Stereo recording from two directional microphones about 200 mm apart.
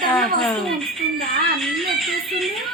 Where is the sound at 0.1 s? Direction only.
5° left (ahead or behind).